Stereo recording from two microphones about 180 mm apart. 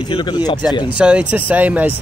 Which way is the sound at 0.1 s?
25° left (ahead or behind).